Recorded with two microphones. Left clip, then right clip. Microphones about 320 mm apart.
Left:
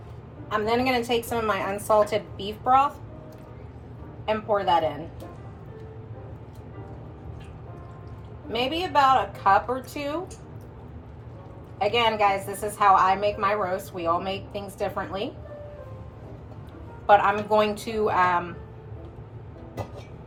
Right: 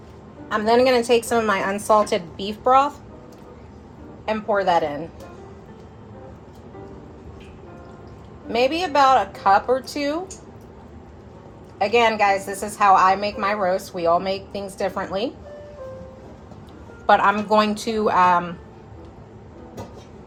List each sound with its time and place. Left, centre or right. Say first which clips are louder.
0.4 s a woman's voice: right 7 dB; right
4.3 s a woman's voice: right 3 dB; right
8.5 s a woman's voice: right 5 dB; right
11.8 s a woman's voice: right 4 dB; right
17.1 s a woman's voice: right 2 dB; right